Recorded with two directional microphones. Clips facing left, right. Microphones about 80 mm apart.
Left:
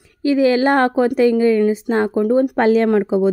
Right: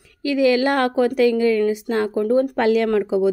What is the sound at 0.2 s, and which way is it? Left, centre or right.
A woman's voice, left.